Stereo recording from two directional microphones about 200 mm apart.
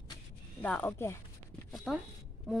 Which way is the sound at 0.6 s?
10° left (ahead or behind).